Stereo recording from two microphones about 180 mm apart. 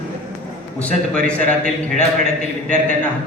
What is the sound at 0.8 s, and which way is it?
Speech, 5° left (ahead or behind).